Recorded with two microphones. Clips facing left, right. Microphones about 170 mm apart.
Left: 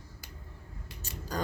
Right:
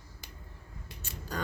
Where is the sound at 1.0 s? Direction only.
35° left (ahead or behind).